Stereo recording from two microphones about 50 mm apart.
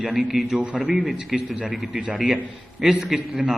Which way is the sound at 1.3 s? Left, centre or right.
Centre.